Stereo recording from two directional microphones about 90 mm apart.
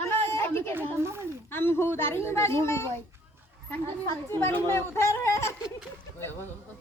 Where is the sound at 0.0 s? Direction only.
25° left (ahead or behind).